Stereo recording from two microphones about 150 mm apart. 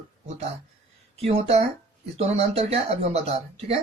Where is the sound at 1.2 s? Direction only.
45° right (ahead or behind).